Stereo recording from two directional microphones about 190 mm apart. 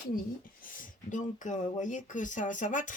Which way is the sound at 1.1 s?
40° left (ahead or behind).